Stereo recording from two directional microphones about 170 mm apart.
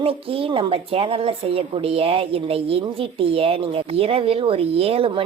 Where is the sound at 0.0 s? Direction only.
35° right (ahead or behind).